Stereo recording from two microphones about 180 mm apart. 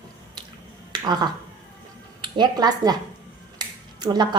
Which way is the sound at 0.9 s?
25° right (ahead or behind).